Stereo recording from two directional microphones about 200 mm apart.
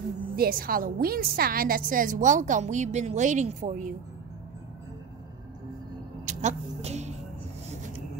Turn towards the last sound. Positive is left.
turn(degrees=-35)  # may be behind; listen again after turning